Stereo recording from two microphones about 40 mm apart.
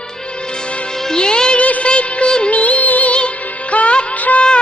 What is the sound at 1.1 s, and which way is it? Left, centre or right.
Music, centre.